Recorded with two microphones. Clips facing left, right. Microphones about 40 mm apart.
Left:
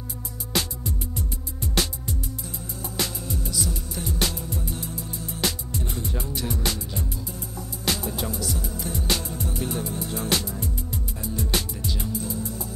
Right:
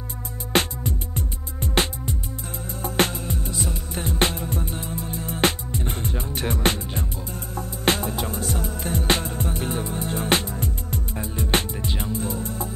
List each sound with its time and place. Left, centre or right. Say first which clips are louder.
0.5 s music: right 6 dB; right